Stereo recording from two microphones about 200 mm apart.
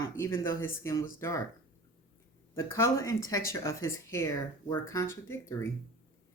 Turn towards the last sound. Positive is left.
turn(degrees=10)  # may be behind; listen again after turning